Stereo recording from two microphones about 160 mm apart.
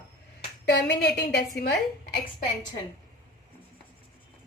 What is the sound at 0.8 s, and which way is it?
A woman's voice, 90° left.